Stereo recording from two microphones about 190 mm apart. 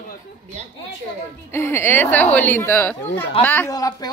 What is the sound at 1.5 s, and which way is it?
A man's voice, 15° left (ahead or behind).